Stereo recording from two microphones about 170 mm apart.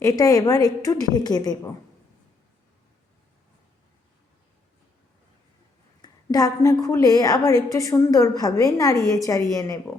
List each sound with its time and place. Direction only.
0.0 s a woman's voice: 20° left (ahead or behind)
6.0 s a sound: 20° left (ahead or behind)
6.8 s a woman's voice: 20° left (ahead or behind)